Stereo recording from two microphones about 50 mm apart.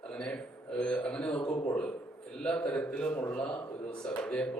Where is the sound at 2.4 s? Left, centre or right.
Left.